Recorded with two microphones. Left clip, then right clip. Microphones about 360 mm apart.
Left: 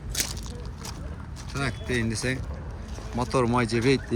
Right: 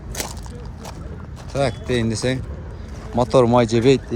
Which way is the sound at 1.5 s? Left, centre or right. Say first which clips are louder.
Right 8 dB; centre.